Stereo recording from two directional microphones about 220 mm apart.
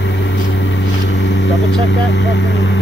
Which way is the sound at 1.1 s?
55° left (ahead or behind).